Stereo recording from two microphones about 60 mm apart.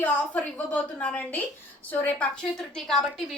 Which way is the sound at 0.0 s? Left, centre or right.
Left.